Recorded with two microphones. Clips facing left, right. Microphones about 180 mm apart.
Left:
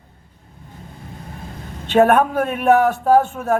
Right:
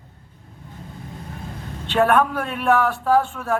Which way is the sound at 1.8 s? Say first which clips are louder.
Left 4 dB; 45° left (ahead or behind).